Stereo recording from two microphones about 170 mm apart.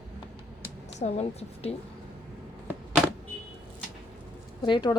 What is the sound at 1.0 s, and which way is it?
Speech, 40° left (ahead or behind).